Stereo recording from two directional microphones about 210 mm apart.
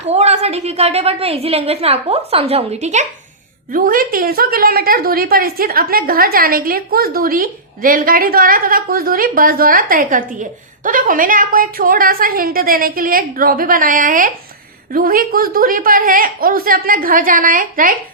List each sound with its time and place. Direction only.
0.0 s a woman's voice: 30° right (ahead or behind)